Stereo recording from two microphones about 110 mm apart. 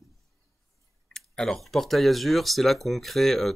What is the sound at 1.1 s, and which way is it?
Speech, 5° left (ahead or behind).